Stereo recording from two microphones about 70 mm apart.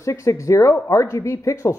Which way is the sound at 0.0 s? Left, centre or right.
Left.